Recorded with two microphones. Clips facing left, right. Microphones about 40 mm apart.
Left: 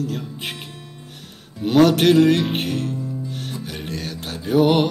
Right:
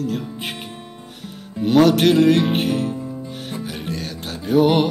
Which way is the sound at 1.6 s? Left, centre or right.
Centre.